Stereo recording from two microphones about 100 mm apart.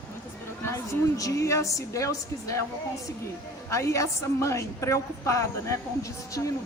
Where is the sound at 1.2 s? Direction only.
30° left (ahead or behind).